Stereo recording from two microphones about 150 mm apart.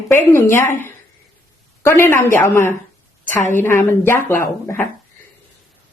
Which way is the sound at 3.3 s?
55° left (ahead or behind).